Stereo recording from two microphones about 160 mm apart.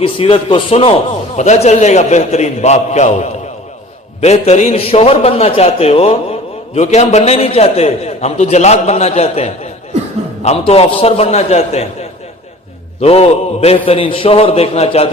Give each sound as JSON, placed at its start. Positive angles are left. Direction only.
{"t": 0.0, "sound": "a man's voice", "side_deg": 35}